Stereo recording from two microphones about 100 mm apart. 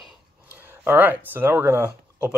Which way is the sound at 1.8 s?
10° right (ahead or behind).